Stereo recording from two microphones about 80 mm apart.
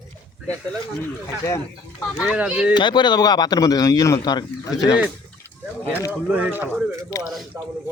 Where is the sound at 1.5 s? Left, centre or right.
Left.